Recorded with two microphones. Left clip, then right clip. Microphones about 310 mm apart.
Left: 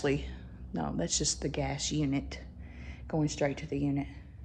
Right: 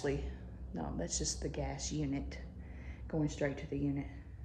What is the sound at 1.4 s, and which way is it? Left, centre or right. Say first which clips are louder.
Speech: left 7 dB; centre.